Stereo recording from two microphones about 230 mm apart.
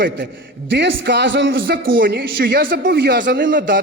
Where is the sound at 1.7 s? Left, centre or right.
Right.